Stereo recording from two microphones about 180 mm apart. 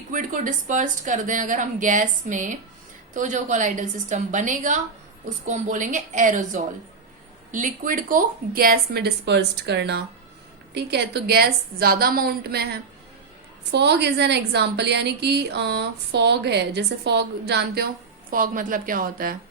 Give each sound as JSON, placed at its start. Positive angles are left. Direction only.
{"t": 0.1, "sound": "a woman's voice", "side_deg": -45}
{"t": 18.3, "sound": "a woman's voice", "side_deg": -50}